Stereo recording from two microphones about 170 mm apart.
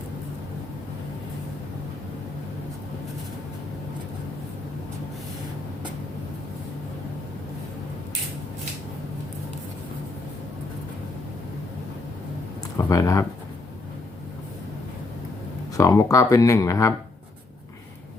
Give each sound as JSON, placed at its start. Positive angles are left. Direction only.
{"t": 12.7, "sound": "speech", "side_deg": 20}
{"t": 15.8, "sound": "speech", "side_deg": 20}